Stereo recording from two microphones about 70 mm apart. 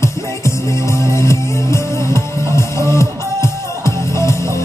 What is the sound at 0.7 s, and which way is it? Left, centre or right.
Music, left.